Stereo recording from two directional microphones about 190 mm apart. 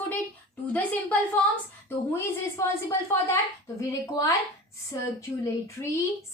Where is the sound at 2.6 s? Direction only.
15° left (ahead or behind).